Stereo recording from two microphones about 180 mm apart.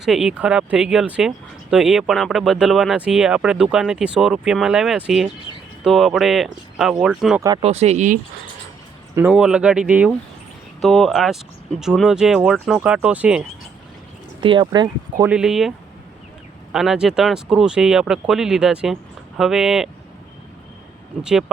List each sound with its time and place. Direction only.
0.0 s speech: 5° right (ahead or behind)
7.6 s speech: 35° right (ahead or behind)
9.1 s speech: 5° right (ahead or behind)
14.4 s speech: 25° right (ahead or behind)
15.2 s speech: 5° right (ahead or behind)
16.7 s speech: 5° right (ahead or behind)
21.2 s speech: 5° right (ahead or behind)